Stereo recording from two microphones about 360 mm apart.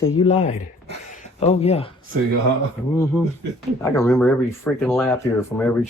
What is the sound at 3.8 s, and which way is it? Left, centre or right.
Speech, centre.